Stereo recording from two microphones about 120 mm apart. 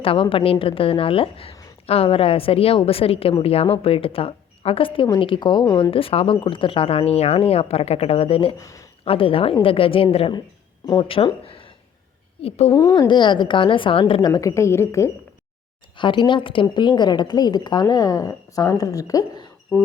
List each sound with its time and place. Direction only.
0.0 s a woman's voice: 50° left (ahead or behind)
8.5 s speech: 25° left (ahead or behind)
9.0 s a woman's voice: 50° left (ahead or behind)
12.4 s a woman's voice: 60° left (ahead or behind)
12.7 s a woman's voice: 35° left (ahead or behind)
16.0 s a woman's voice: 45° left (ahead or behind)